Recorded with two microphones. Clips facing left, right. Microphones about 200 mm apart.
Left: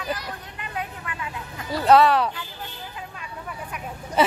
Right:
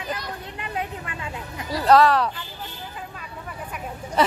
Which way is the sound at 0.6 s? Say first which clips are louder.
Right 2 dB; 25° right (ahead or behind).